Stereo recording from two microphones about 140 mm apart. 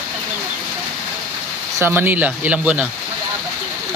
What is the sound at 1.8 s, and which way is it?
Speech, 15° right (ahead or behind).